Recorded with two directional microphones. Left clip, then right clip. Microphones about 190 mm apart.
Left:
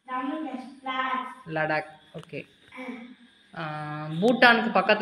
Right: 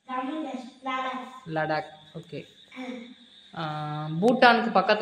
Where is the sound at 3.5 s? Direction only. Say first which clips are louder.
Right 1 dB; 20° right (ahead or behind).